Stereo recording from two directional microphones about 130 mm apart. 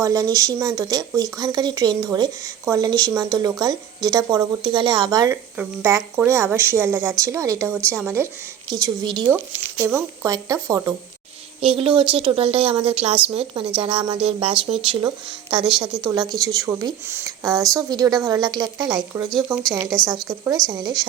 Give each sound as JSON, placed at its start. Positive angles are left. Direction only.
{"t": 0.0, "sound": "speech", "side_deg": -25}
{"t": 5.5, "sound": "speech", "side_deg": -15}
{"t": 8.7, "sound": "speech", "side_deg": -30}
{"t": 9.2, "sound": "speech", "side_deg": -10}
{"t": 11.6, "sound": "a woman's voice", "side_deg": -45}